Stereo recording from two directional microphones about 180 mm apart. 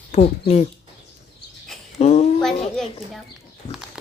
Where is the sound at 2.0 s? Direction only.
35° left (ahead or behind).